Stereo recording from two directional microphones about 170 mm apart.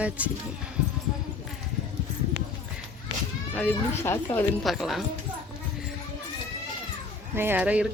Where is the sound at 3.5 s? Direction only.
10° left (ahead or behind).